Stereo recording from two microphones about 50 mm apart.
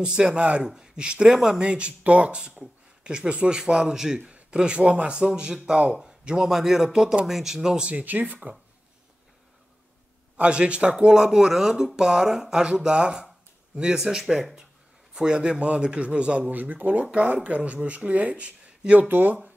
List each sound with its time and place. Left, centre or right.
0.0 s a man's voice: centre
7.9 s speech: right
10.3 s a man's voice: right; by 14.5 s centre
15.1 s speech: centre
16.5 s speech: right
19.0 s speech: right